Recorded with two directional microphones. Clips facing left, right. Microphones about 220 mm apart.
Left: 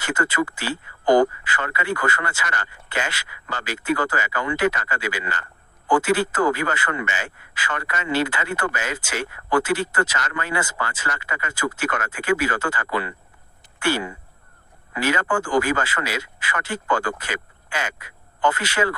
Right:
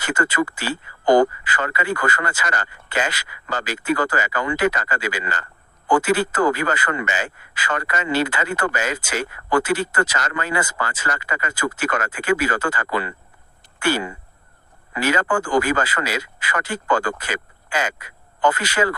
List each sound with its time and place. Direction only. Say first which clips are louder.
0.0 s speech: right 2 dB; 40° right (ahead or behind)
12.1 s speech: even; 40° right (ahead or behind)
15.1 s speech: right 2 dB; 40° right (ahead or behind)